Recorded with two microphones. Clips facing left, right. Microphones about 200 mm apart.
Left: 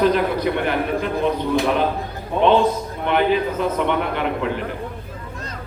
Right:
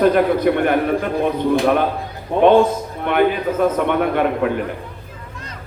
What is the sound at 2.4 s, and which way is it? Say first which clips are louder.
A man's voice: right 4 dB; 50° right (ahead or behind).